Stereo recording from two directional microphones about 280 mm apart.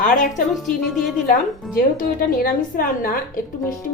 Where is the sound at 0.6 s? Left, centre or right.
Centre.